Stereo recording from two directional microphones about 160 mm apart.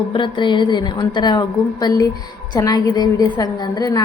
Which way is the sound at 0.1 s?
30° left (ahead or behind).